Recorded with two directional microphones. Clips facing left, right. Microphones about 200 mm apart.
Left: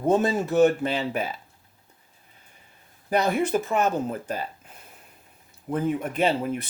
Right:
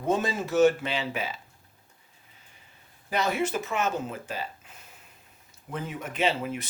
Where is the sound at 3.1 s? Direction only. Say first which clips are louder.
Left 5 dB; 50° left (ahead or behind).